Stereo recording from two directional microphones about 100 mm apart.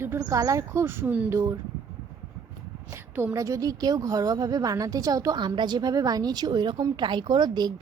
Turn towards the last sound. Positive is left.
turn(degrees=-45)  # may be behind; listen again after turning